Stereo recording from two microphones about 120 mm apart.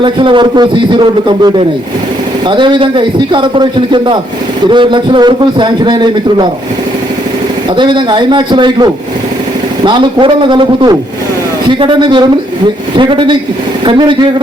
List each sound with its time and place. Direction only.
0.0 s a man's voice: 45° right (ahead or behind)
7.8 s a man's voice: 40° right (ahead or behind)